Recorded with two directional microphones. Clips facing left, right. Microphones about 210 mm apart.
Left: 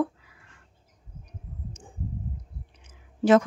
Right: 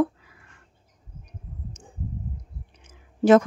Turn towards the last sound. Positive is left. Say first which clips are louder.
# right 3 dB
turn(degrees=-45)  # may be behind; listen again after turning